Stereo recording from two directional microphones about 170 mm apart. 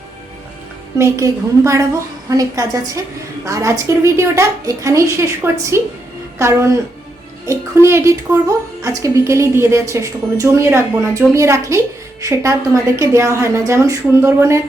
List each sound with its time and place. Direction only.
0.9 s a woman's voice: 15° right (ahead or behind)